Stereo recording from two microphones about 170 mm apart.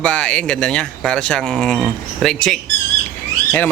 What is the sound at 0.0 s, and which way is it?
Speech, 5° left (ahead or behind).